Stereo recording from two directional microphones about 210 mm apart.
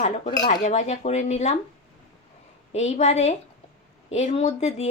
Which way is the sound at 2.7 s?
30° left (ahead or behind).